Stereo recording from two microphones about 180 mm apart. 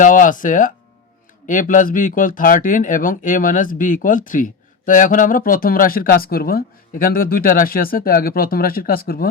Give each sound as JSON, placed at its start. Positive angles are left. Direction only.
{"t": 0.0, "sound": "speech", "side_deg": 45}